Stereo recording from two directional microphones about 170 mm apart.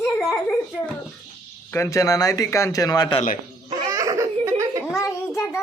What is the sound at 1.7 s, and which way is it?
A man's voice, 15° left (ahead or behind).